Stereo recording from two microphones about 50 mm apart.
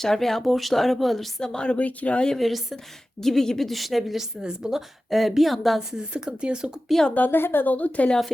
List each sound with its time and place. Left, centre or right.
0.0 s speech: centre
1.4 s a woman's voice: centre
2.2 s speech: centre
4.4 s speech: centre
5.1 s speech: centre
5.9 s speech: centre
7.1 s a woman's voice: left